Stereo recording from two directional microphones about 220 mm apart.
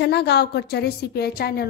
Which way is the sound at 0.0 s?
50° left (ahead or behind).